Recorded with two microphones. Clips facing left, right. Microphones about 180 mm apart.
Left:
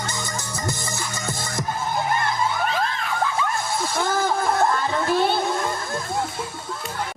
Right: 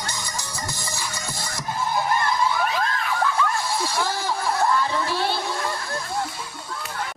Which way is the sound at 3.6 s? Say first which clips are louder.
Left 1 dB; 55° left (ahead or behind).